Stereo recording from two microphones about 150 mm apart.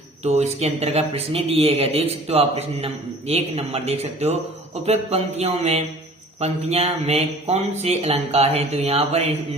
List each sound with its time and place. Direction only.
0.2 s speech: 45° right (ahead or behind)